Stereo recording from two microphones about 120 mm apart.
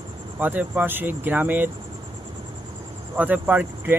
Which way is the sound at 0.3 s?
15° right (ahead or behind).